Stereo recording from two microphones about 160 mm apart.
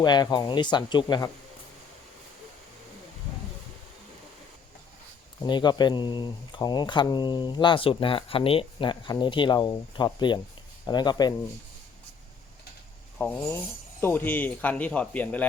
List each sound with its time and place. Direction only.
0.0 s speech: 25° left (ahead or behind)
5.4 s speech: 30° left (ahead or behind)
13.1 s a sound: 10° left (ahead or behind)
14.0 s speech: 15° left (ahead or behind)